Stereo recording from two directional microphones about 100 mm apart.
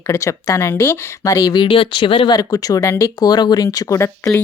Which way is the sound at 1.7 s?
60° left (ahead or behind).